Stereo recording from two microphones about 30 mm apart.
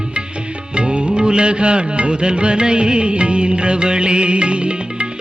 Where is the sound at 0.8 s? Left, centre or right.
Right.